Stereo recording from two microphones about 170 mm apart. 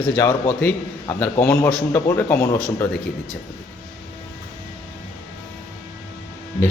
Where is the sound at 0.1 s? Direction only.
10° left (ahead or behind).